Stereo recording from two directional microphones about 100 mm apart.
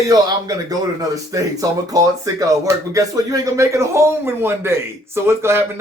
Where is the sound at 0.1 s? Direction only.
35° right (ahead or behind).